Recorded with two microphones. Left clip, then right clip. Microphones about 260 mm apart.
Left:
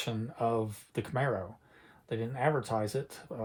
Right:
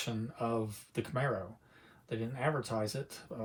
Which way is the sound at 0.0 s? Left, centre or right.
Left.